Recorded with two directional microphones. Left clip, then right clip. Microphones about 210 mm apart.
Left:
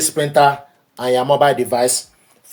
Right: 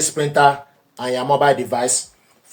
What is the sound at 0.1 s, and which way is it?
Speech, 40° left (ahead or behind).